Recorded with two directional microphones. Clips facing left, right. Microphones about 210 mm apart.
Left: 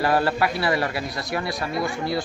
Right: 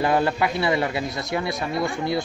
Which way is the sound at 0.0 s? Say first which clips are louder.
Even; 20° right (ahead or behind).